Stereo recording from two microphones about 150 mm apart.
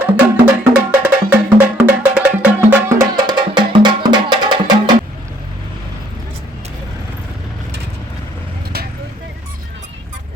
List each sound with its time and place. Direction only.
0.0 s music: 10° right (ahead or behind)
3.2 s music: 30° right (ahead or behind)